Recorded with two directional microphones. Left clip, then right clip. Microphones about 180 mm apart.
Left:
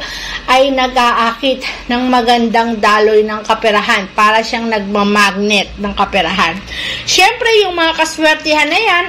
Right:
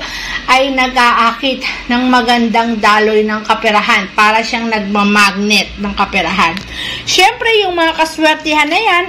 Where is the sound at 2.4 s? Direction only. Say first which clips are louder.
Even; centre (ahead or behind).